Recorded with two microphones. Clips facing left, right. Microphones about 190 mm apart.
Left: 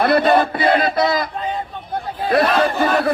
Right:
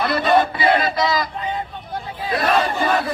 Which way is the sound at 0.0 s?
60° left (ahead or behind).